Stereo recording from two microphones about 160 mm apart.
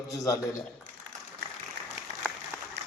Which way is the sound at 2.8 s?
90° right.